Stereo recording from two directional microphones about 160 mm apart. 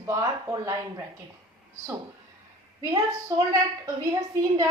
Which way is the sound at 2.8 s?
25° right (ahead or behind).